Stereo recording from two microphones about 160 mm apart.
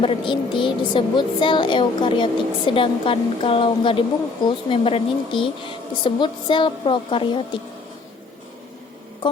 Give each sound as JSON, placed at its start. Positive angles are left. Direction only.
{"t": 0.0, "sound": "speech", "side_deg": 30}